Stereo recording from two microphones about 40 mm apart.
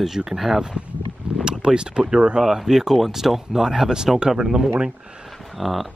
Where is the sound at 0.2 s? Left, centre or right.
Right.